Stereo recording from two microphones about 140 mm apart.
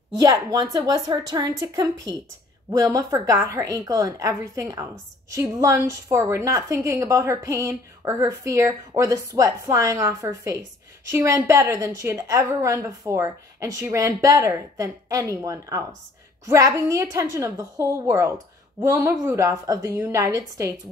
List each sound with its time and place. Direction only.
0.1 s a woman's voice: 25° right (ahead or behind)